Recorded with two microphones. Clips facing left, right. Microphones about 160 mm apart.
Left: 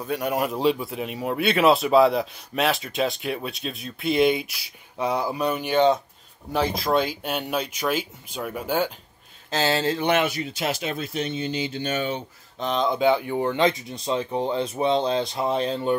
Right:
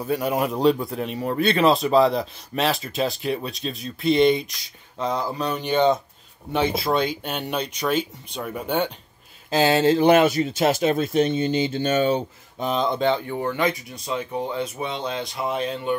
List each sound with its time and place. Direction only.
0.2 s speech: centre (ahead or behind)
9.5 s speech: 15° right (ahead or behind); by 12.3 s 40° right (ahead or behind)
12.5 s speech: 5° right (ahead or behind); by 16.0 s 30° left (ahead or behind)